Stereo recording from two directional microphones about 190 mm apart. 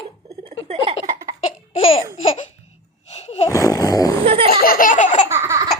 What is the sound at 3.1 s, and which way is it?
Roar, 30° left (ahead or behind).